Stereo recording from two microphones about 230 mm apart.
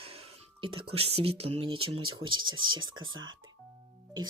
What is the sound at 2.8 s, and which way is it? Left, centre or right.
Speech, right.